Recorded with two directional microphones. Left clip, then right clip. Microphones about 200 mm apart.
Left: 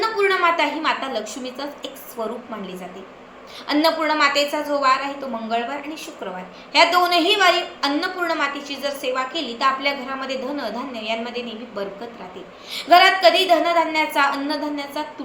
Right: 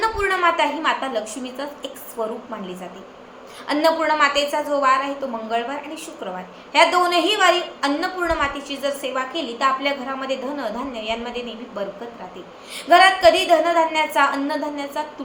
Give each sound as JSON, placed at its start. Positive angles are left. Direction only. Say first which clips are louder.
{"t": 0.0, "sound": "a woman's voice", "louder": "left 1 dB", "side_deg": -10}
{"t": 3.7, "sound": "a woman's voice", "louder": "right 1 dB", "side_deg": -5}